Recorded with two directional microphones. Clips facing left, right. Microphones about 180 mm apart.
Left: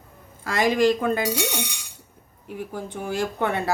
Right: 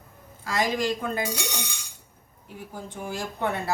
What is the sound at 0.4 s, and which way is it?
Speech, 60° left (ahead or behind).